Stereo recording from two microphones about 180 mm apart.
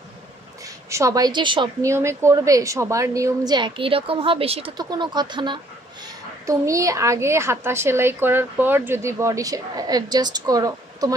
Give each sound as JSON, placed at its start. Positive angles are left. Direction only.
{"t": 0.8, "sound": "a woman's voice", "side_deg": -15}